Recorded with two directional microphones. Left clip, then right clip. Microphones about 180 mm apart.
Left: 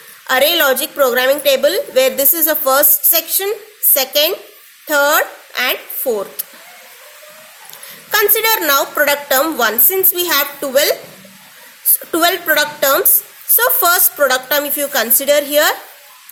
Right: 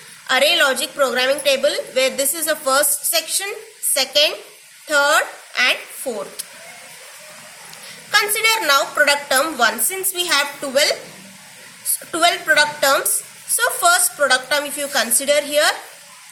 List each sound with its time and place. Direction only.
0.3 s a woman's voice: 50° left (ahead or behind)
8.1 s a woman's voice: 50° left (ahead or behind)